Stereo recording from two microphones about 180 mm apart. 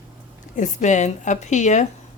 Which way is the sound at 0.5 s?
40° left (ahead or behind).